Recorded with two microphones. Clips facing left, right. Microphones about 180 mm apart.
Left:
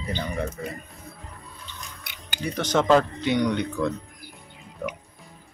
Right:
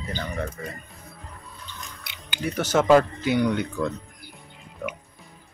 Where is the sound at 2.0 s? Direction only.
50° left (ahead or behind).